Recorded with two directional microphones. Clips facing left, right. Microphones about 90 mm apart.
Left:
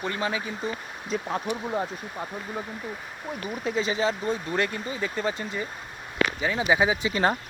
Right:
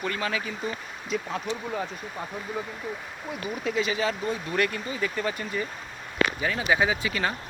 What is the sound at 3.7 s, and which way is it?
Speech, 30° left (ahead or behind).